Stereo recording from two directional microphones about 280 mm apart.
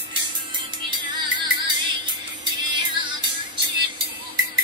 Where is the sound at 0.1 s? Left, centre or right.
Centre.